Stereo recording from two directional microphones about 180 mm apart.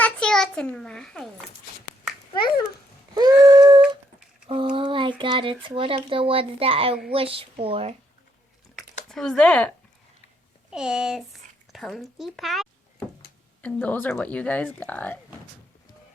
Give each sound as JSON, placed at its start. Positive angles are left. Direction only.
{"t": 0.0, "sound": "a child's voice", "side_deg": 5}
{"t": 2.3, "sound": "a child's voice", "side_deg": 25}
{"t": 3.4, "sound": "a sound", "side_deg": -20}
{"t": 4.7, "sound": "speech", "side_deg": -25}
{"t": 9.0, "sound": "speech", "side_deg": 5}